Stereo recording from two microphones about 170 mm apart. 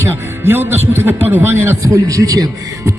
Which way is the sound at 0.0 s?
15° right (ahead or behind).